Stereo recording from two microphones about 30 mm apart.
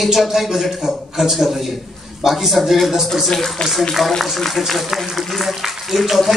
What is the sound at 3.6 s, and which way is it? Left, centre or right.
Speech, left.